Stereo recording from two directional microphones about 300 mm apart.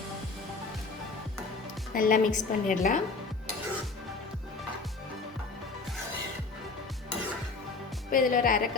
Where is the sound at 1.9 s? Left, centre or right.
Left.